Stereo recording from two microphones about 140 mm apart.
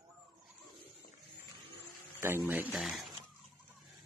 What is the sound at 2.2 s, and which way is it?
Speech, 20° right (ahead or behind).